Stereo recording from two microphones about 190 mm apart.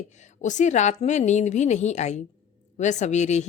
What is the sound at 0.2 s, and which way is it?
A woman's voice, 40° left (ahead or behind).